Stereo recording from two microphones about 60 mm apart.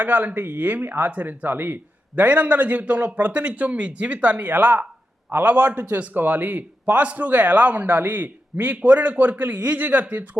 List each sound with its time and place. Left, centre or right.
0.0 s a man's voice: right